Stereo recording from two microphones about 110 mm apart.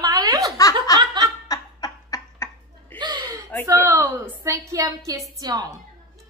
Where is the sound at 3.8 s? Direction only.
20° right (ahead or behind).